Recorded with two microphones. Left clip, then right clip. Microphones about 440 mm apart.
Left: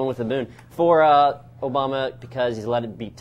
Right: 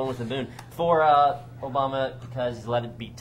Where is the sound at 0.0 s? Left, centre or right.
Left.